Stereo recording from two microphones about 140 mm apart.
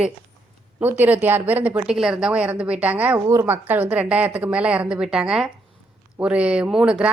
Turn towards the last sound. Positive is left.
turn(degrees=-5)  # may be behind; listen again after turning